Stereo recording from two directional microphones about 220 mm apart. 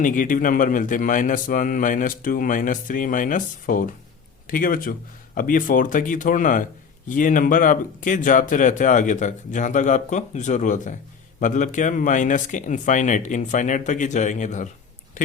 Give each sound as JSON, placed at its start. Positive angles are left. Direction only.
{"t": 0.0, "sound": "a man's voice", "side_deg": 35}